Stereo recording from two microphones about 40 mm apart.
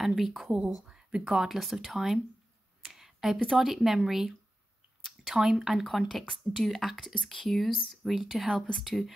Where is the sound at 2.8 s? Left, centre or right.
Centre.